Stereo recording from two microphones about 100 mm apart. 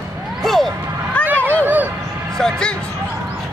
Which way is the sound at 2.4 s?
10° left (ahead or behind).